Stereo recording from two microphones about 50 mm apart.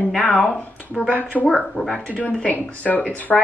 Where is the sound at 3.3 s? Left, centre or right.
Centre.